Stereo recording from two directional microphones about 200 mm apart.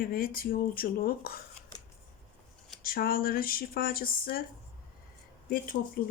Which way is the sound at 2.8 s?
45° left (ahead or behind).